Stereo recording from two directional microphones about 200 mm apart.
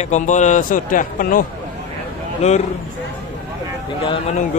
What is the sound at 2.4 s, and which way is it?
Speech, 35° left (ahead or behind).